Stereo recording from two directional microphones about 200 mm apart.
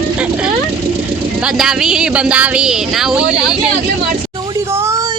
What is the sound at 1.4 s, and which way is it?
Speech, 5° right (ahead or behind).